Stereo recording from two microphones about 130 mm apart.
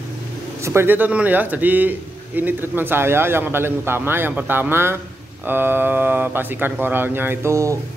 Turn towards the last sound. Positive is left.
turn(degrees=-25)  # may be behind; listen again after turning